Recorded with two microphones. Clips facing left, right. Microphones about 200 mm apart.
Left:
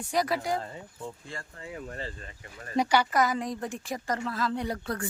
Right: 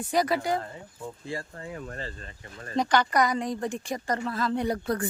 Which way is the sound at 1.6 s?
40° right (ahead or behind).